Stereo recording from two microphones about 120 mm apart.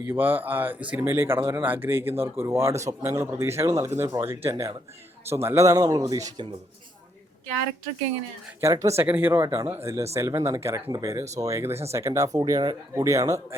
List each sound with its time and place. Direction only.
0.0 s speech: 15° right (ahead or behind); by 6.5 s 35° right (ahead or behind)
8.6 s speech: 25° right (ahead or behind)